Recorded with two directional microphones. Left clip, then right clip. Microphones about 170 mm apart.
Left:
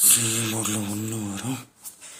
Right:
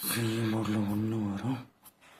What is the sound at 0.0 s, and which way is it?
Speech, 10° left (ahead or behind).